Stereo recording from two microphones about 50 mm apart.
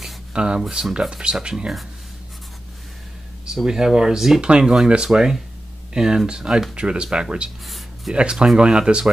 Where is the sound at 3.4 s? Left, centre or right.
Centre.